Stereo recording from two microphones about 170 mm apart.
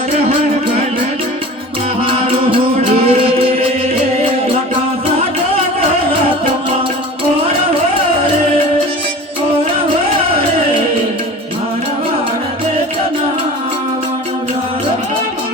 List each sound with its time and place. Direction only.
0.1 s music: 35° right (ahead or behind)
3.0 s music: 35° right (ahead or behind)